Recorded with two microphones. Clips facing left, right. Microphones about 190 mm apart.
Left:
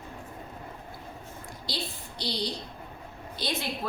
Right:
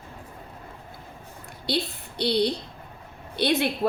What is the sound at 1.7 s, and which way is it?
A woman's voice, 60° right (ahead or behind).